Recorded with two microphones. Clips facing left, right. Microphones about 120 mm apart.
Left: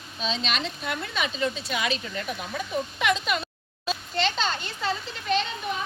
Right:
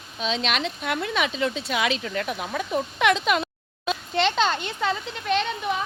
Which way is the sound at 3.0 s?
75° right (ahead or behind).